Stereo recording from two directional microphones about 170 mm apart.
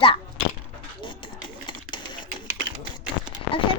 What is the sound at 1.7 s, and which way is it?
Sewing machine, 30° left (ahead or behind).